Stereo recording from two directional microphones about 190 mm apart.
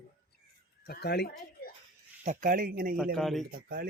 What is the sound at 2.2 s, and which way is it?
Speech, 40° right (ahead or behind).